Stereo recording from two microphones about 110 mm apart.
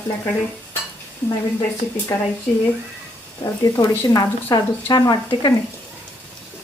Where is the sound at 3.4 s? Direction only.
25° left (ahead or behind).